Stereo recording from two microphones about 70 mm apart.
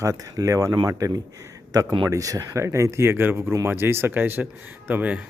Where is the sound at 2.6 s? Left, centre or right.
Right.